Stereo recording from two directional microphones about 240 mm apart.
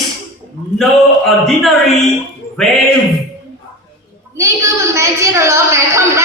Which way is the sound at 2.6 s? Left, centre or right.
Centre.